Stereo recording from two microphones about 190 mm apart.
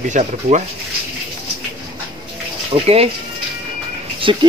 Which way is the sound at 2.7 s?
30° right (ahead or behind).